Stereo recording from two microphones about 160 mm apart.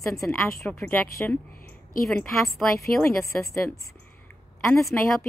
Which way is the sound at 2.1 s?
15° left (ahead or behind).